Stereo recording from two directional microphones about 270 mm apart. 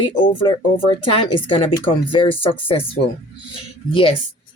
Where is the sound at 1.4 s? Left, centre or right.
Centre.